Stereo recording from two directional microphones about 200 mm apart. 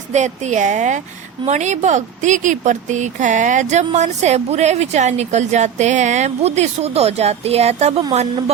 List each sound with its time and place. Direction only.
0.1 s speech: 35° right (ahead or behind)